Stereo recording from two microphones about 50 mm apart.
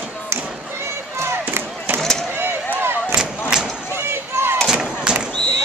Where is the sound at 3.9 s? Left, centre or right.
Right.